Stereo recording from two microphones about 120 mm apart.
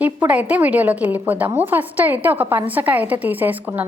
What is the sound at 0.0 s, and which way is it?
A woman's voice, 10° right (ahead or behind).